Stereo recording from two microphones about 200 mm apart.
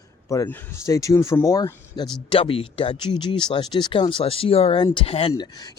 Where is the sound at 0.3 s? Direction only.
15° left (ahead or behind).